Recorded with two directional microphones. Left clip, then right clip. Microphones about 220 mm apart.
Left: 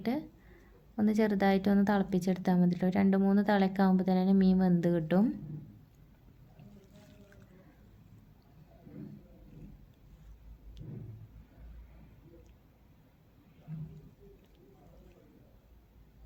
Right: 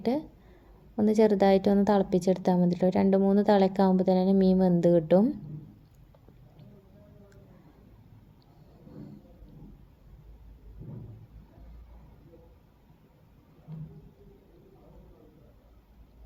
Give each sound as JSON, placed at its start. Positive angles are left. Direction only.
{"t": 0.0, "sound": "a woman's voice", "side_deg": -20}